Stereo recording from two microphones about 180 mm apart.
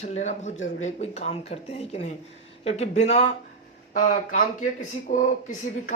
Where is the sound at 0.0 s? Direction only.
40° left (ahead or behind).